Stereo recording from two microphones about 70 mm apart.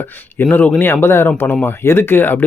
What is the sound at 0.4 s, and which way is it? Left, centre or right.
Speech, left.